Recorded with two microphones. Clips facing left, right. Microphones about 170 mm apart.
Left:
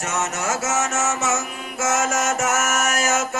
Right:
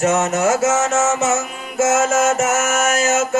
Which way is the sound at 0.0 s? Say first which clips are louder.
Right 9 dB; 30° right (ahead or behind).